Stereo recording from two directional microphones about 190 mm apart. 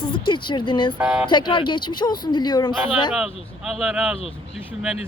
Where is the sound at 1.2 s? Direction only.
25° left (ahead or behind).